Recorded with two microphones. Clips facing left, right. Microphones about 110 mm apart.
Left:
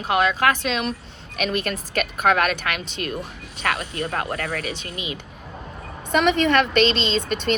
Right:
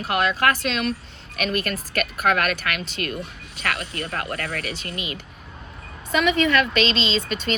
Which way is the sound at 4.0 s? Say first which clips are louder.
Left 3 dB; 40° left (ahead or behind).